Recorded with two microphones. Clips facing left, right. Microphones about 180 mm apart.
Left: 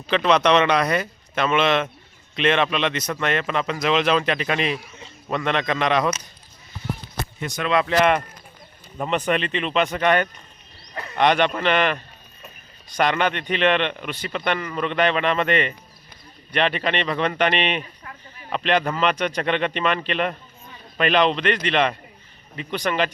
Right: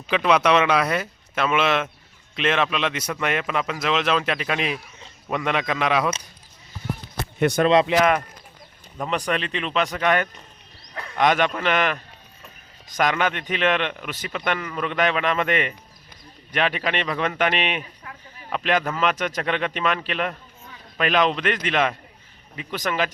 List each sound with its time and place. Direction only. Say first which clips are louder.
0.1 s a man's voice: left 1 dB; 10° right (ahead or behind)
7.3 s speech: right 15 dB; 60° right (ahead or behind)
7.6 s speech: right 4 dB; 30° right (ahead or behind)
9.0 s a man's voice: left 3 dB; centre (ahead or behind)
13.0 s a man's voice: left 1 dB; 5° right (ahead or behind)